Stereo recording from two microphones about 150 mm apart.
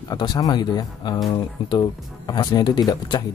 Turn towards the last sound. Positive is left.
turn(degrees=30)  # may be behind; listen again after turning